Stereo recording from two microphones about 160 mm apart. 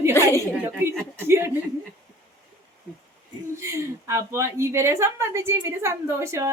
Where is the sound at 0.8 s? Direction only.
15° right (ahead or behind).